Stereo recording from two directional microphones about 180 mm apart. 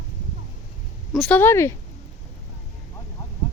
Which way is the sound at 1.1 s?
5° left (ahead or behind).